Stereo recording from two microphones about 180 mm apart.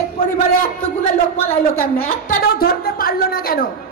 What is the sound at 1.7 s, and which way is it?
A woman's voice, 60° left (ahead or behind).